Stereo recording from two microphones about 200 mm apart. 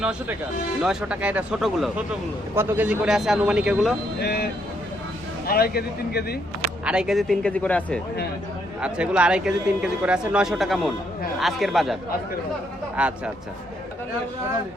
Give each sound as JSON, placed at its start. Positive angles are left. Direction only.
{"t": 0.0, "sound": "speech", "side_deg": -5}
{"t": 4.2, "sound": "a man's voice", "side_deg": 50}
{"t": 5.5, "sound": "a man's voice", "side_deg": 50}
{"t": 6.8, "sound": "speech", "side_deg": -5}
{"t": 8.8, "sound": "speech", "side_deg": -5}
{"t": 13.0, "sound": "speech", "side_deg": -5}